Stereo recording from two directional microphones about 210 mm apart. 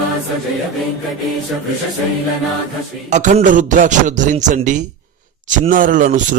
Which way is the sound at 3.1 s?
35° right (ahead or behind).